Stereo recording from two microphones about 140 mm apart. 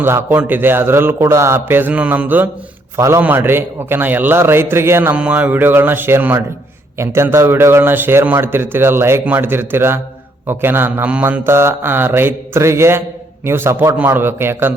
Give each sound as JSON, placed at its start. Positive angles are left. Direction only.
{"t": 0.0, "sound": "a man's voice", "side_deg": -15}